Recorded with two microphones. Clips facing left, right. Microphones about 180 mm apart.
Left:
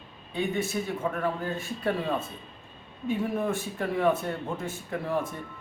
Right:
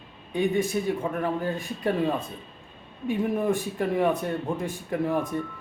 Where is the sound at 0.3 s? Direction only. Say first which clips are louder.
Right 4 dB; 15° right (ahead or behind).